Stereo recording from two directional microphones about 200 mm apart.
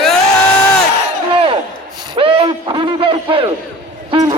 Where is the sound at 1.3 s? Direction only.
25° right (ahead or behind).